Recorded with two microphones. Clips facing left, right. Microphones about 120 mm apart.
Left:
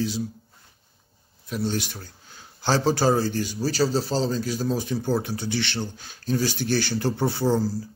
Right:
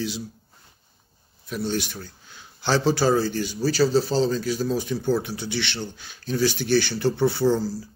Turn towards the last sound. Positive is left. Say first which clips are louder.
# right 1 dB
turn(degrees=45)  # may be behind; listen again after turning